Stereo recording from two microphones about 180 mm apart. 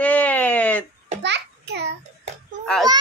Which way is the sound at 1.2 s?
70° right (ahead or behind).